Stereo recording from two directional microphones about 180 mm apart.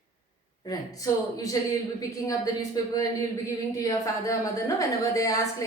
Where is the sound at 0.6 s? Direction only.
20° left (ahead or behind).